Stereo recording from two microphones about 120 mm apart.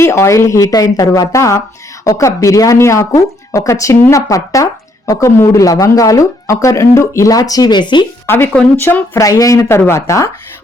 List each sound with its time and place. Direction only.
0.0 s speech: 25° left (ahead or behind); by 8.0 s 40° left (ahead or behind)
8.3 s speech: 20° left (ahead or behind)